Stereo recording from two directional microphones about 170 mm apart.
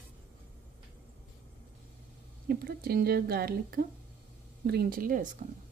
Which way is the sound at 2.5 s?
65° right (ahead or behind).